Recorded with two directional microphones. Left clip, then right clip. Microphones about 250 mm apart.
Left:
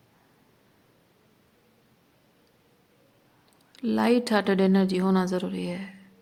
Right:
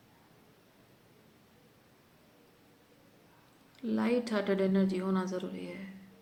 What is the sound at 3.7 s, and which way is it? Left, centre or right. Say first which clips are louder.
A woman's voice: left 8 dB; left.